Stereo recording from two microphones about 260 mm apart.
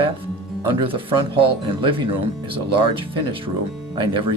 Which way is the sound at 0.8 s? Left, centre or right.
Centre.